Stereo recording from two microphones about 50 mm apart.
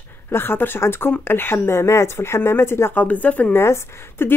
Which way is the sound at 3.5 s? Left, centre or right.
Left.